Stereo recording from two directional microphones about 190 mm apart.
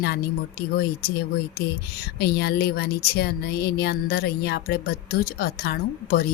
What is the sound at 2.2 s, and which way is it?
Speech, 55° left (ahead or behind).